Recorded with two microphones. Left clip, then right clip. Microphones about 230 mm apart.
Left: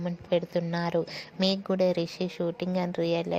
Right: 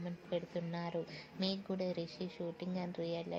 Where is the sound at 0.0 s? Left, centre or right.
Left.